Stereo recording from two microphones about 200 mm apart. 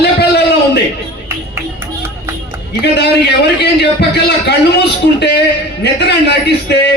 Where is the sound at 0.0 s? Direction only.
55° left (ahead or behind).